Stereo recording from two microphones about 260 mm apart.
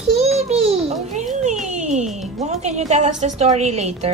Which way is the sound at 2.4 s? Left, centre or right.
Right.